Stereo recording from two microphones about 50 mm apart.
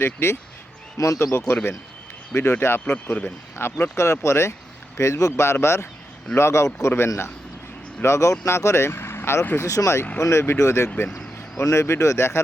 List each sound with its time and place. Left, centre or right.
0.0 s speech: left
1.0 s speech: left
2.3 s speech: left
2.8 s speech: left
3.6 s speech: left
3.9 s speech: left
4.9 s speech: left
8.0 s speech: left
9.6 s speech: left
10.6 s speech: left